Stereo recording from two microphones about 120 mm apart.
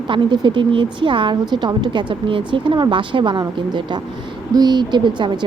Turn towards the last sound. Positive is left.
turn(degrees=-40)  # may be behind; listen again after turning